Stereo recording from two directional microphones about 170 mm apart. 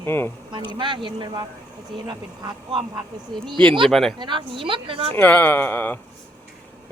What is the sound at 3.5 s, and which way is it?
Speech, 30° right (ahead or behind).